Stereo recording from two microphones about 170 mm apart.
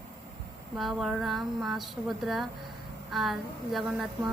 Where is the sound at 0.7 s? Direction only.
Centre (ahead or behind).